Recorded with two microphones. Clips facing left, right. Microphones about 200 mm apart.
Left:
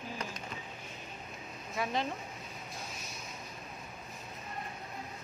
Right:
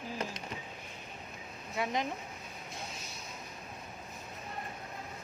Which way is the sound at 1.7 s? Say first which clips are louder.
Even; 20° right (ahead or behind).